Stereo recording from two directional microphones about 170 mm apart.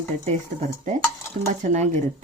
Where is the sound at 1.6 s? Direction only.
45° right (ahead or behind).